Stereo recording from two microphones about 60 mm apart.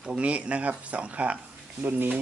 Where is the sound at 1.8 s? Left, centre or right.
Right.